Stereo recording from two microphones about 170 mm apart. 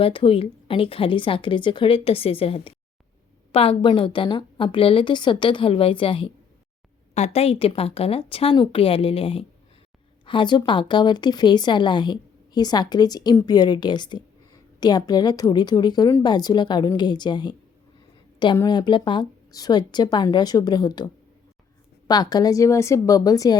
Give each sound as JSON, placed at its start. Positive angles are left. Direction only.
{"t": 0.0, "sound": "a woman's voice", "side_deg": 30}